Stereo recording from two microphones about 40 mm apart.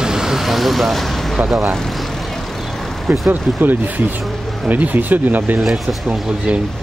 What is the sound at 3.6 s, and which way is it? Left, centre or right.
Speech, right.